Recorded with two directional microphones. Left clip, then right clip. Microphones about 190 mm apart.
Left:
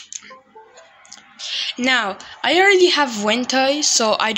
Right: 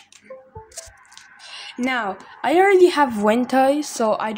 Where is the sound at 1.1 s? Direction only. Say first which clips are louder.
Left 11 dB; 10° right (ahead or behind).